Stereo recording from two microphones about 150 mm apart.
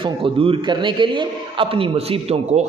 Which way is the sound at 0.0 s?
35° right (ahead or behind).